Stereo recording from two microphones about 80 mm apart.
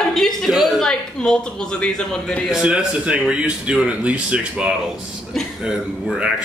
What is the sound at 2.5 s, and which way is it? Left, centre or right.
Speech, centre.